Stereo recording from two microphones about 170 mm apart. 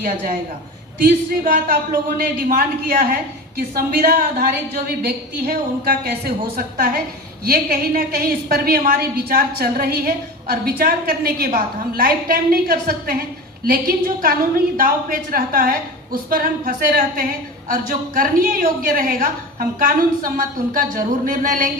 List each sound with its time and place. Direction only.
0.9 s a woman's voice: 60° right (ahead or behind)